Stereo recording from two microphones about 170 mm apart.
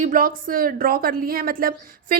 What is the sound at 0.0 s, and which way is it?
A woman's voice, 50° right (ahead or behind).